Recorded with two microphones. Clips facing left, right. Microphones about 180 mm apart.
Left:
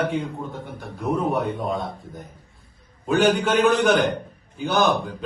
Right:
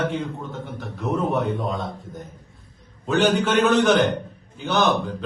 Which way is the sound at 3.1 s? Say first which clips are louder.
Even; centre (ahead or behind).